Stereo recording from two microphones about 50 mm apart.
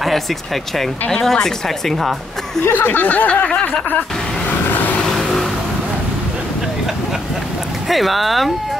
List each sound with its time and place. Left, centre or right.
1.2 s speech: centre
2.6 s speech: left
3.0 s speech: left
4.6 s vehicle: left
5.0 s vehicle: centre
7.9 s speech: centre